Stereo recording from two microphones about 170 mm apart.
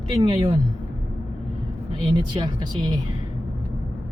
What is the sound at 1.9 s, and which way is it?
Speech, 25° right (ahead or behind).